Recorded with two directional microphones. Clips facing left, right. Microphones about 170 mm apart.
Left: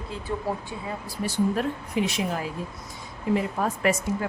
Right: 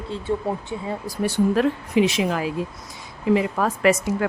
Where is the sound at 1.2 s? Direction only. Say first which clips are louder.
Right 6 dB; 80° right.